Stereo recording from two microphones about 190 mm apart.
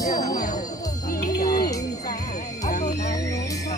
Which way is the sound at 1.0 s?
55° left (ahead or behind).